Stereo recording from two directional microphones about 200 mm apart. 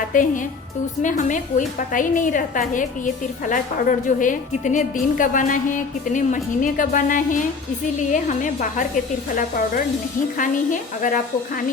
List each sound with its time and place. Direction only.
0.1 s a woman's voice: 40° left (ahead or behind)
10.3 s a woman's voice: 40° left (ahead or behind)